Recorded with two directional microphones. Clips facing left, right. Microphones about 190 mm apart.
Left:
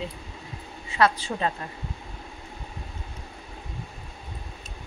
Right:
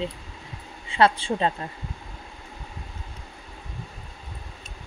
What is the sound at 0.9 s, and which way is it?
Speech, 30° right (ahead or behind).